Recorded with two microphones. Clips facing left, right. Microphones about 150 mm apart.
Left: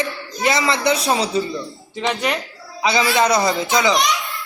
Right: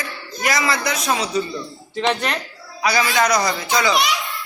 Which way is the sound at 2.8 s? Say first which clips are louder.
Left 2 dB; 25° left (ahead or behind).